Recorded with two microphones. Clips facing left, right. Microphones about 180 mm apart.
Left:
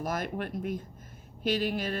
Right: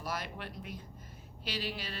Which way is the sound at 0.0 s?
50° left (ahead or behind).